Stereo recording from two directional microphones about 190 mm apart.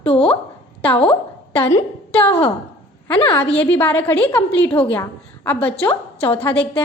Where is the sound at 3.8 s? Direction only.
10° left (ahead or behind).